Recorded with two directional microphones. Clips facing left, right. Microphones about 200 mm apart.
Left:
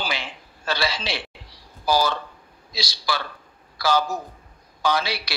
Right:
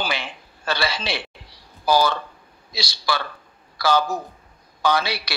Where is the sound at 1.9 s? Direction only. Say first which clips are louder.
Right 2 dB; 60° right (ahead or behind).